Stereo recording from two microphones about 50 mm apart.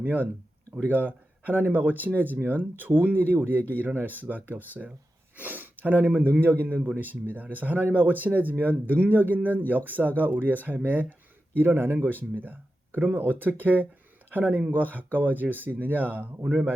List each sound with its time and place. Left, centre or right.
0.0 s speech: right
11.5 s speech: right
12.3 s speech: right